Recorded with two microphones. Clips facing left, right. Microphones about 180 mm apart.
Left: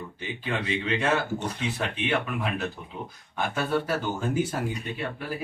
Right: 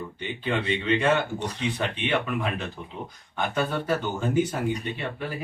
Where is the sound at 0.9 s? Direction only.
5° left (ahead or behind).